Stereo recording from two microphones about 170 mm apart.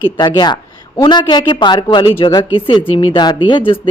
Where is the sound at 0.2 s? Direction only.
25° left (ahead or behind).